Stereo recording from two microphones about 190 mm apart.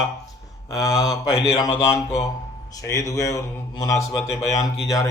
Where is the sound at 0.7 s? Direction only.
20° left (ahead or behind).